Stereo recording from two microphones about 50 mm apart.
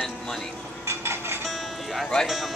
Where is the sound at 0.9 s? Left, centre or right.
Right.